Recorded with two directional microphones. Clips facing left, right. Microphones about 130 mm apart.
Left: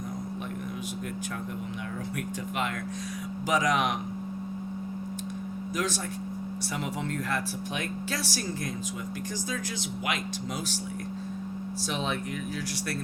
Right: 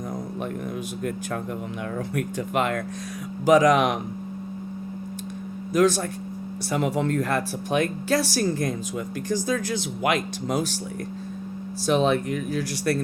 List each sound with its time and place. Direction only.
0.1 s speech: 70° right (ahead or behind); by 2.8 s 85° right
3.4 s speech: 65° right (ahead or behind)
5.7 s speech: 60° right (ahead or behind)
10.1 s speech: 80° right
11.9 s speech: 60° right (ahead or behind)